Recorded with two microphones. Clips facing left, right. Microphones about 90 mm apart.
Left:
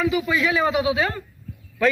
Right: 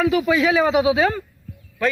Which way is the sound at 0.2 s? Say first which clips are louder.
Right 4 dB; 90° right.